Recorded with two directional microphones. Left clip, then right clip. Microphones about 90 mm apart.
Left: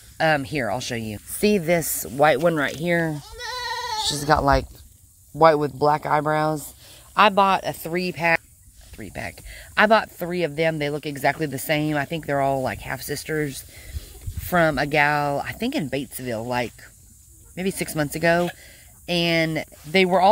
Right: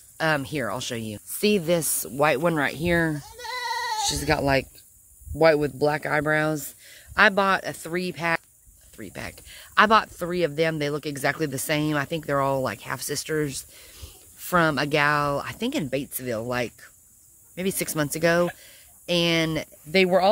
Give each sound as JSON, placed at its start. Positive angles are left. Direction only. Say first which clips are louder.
{"t": 0.2, "sound": "speech", "louder": "left 4 dB", "side_deg": -25}
{"t": 0.7, "sound": "speech", "louder": "left 3 dB", "side_deg": -10}
{"t": 2.4, "sound": "speech", "louder": "left 2 dB", "side_deg": -40}
{"t": 3.2, "sound": "goat", "louder": "left 1 dB", "side_deg": -65}
{"t": 4.0, "sound": "speech", "louder": "left 7 dB", "side_deg": -15}
{"t": 7.2, "sound": "speech", "louder": "left 3 dB", "side_deg": -20}
{"t": 7.6, "sound": "speech", "louder": "left 3 dB", "side_deg": -5}
{"t": 8.9, "sound": "speech", "louder": "left 3 dB", "side_deg": -40}
{"t": 19.9, "sound": "speech", "louder": "left 2 dB", "side_deg": -25}